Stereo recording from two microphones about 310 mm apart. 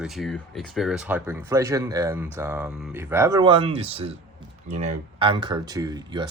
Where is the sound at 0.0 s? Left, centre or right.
Centre.